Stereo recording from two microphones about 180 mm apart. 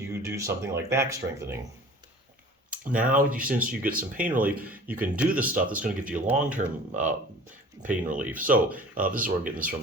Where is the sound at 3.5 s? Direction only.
10° right (ahead or behind).